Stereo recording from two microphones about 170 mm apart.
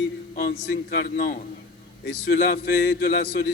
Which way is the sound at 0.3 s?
65° left (ahead or behind).